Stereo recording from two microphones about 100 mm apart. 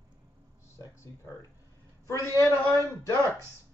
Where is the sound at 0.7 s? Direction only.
30° left (ahead or behind).